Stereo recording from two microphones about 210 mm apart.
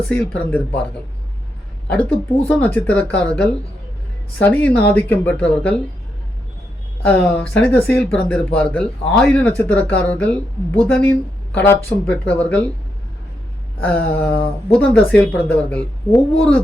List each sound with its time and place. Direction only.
0.1 s speech: 5° left (ahead or behind)
1.9 s speech: 5° left (ahead or behind)
7.0 s speech: 5° left (ahead or behind)
13.8 s speech: 5° left (ahead or behind)